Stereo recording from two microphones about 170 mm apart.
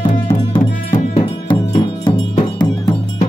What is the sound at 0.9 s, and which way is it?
Music, 45° left (ahead or behind).